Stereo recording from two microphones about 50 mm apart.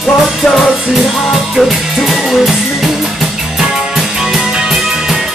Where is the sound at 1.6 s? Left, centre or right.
Centre.